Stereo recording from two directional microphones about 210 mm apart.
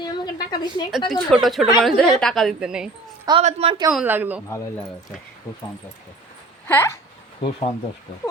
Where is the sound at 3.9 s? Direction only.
10° right (ahead or behind).